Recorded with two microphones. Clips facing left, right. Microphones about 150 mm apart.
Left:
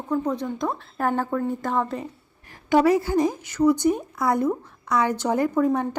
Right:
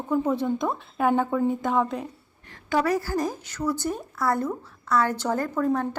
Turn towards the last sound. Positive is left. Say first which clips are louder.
# left 4 dB
turn(degrees=10)  # may be behind; listen again after turning